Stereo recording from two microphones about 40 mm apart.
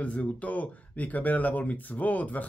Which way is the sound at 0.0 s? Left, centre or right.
Left.